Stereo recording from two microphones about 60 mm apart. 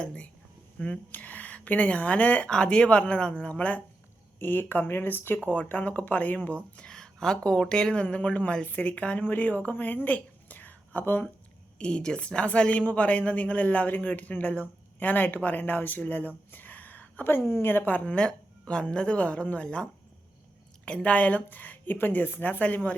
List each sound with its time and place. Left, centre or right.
0.0 s a woman's voice: centre
1.1 s a woman's voice: left
5.5 s a woman's voice: left
6.7 s a woman's voice: centre; by 11.3 s left
11.8 s a woman's voice: centre